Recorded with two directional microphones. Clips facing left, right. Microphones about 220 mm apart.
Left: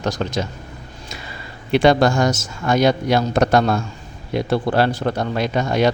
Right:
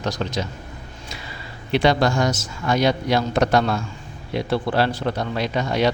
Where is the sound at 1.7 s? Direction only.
50° left (ahead or behind).